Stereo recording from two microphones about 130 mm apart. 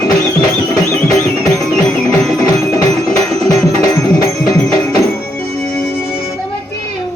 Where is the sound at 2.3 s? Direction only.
25° left (ahead or behind).